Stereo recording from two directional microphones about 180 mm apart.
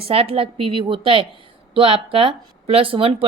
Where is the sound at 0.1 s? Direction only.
30° right (ahead or behind).